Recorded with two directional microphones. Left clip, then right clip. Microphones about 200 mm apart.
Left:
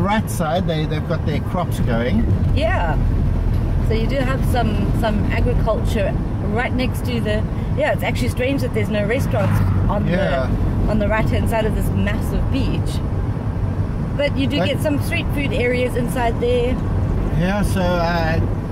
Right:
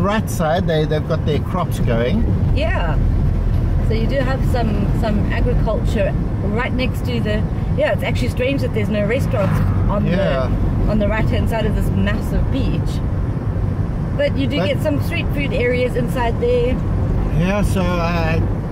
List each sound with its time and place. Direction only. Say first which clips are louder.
0.0 s speech: right 1 dB; 30° right (ahead or behind)
3.9 s speech: right 1 dB; 5° left (ahead or behind)
11.0 s speech: left 1 dB; 5° left (ahead or behind)
14.2 s speech: right 1 dB; 5° left (ahead or behind)
17.4 s speech: right 1 dB; 25° right (ahead or behind)